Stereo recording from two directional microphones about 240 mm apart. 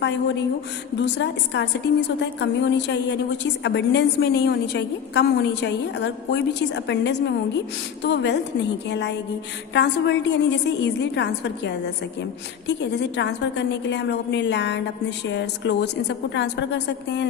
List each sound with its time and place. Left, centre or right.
0.0 s a woman's voice: left